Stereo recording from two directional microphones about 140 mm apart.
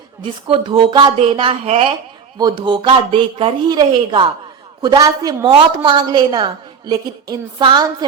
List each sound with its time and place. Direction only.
0.2 s a woman's voice: 35° right (ahead or behind)